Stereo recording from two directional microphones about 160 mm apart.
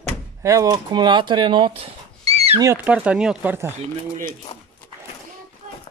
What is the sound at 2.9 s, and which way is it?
Speech, 10° right (ahead or behind).